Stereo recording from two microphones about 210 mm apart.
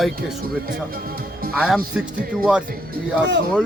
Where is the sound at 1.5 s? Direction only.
5° right (ahead or behind).